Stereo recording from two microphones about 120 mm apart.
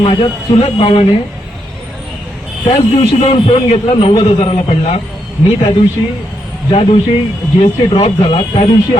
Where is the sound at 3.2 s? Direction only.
55° left (ahead or behind).